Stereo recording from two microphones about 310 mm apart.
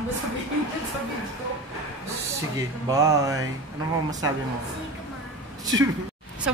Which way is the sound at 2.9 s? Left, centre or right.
Centre.